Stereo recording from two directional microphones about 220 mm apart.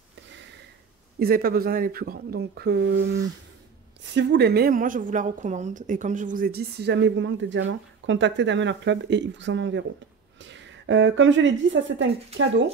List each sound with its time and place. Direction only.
1.2 s a woman's voice: 45° right (ahead or behind)